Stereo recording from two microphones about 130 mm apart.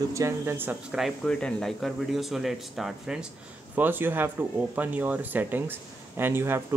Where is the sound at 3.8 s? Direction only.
15° right (ahead or behind).